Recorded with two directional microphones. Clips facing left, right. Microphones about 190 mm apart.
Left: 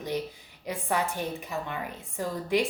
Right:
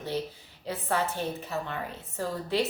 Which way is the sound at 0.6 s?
15° left (ahead or behind).